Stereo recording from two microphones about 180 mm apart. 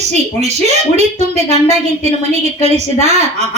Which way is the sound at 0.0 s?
40° right (ahead or behind).